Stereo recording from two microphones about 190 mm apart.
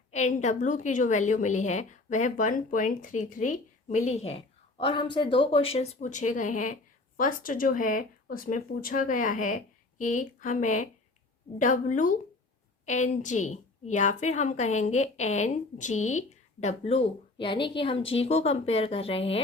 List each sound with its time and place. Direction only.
0.1 s a woman's voice: 40° left (ahead or behind)